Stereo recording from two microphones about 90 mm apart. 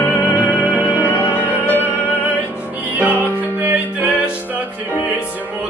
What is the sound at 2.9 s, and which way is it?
Music, 20° right (ahead or behind).